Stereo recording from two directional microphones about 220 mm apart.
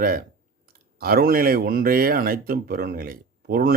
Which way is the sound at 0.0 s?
40° right (ahead or behind).